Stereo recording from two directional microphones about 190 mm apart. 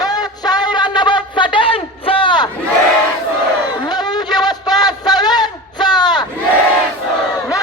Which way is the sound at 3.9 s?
20° left (ahead or behind).